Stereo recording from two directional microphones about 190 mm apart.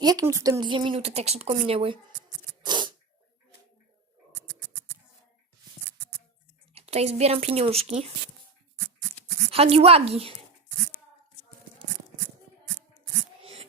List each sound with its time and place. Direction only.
0.0 s speech: 20° right (ahead or behind)
2.6 s sneeze: 25° right (ahead or behind)
6.7 s speech: 35° right (ahead or behind)
9.5 s speech: 30° right (ahead or behind)
13.4 s a sound: 30° right (ahead or behind)